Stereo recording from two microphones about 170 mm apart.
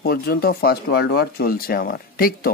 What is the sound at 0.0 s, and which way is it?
Speech, 65° left (ahead or behind).